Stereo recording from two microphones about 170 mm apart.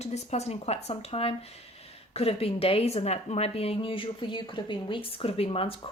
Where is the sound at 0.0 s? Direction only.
40° left (ahead or behind).